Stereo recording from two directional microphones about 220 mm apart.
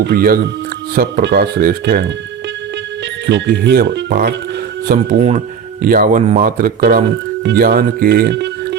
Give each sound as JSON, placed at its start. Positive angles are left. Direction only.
{"t": 0.0, "sound": "speech", "side_deg": -45}
{"t": 3.2, "sound": "speech", "side_deg": -50}
{"t": 4.9, "sound": "speech", "side_deg": -35}